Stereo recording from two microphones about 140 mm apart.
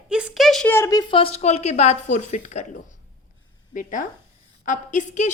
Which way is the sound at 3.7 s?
70° left (ahead or behind).